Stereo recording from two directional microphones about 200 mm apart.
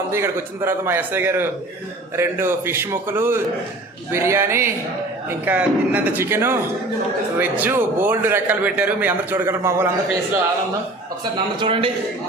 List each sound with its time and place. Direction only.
0.1 s speech: 10° right (ahead or behind)
11.6 s a man's voice: 25° right (ahead or behind)